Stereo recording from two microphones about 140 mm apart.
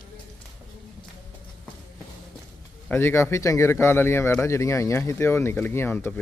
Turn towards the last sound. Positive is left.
turn(degrees=15)  # may be behind; listen again after turning